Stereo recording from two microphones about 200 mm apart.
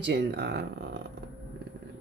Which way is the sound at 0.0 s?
55° right (ahead or behind).